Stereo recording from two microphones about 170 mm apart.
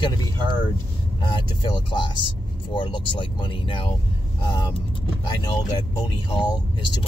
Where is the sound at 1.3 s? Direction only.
25° left (ahead or behind).